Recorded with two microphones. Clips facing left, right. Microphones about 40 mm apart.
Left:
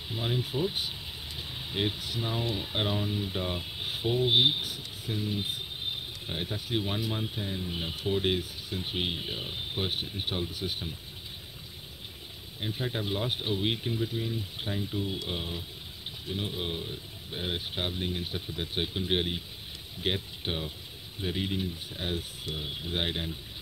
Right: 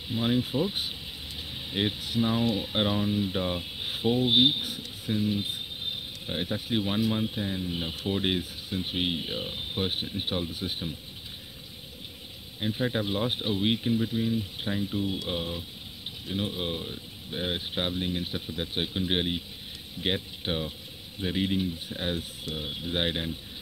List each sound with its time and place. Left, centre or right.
0.1 s speech: centre
4.6 s speech: right
12.5 s speech: centre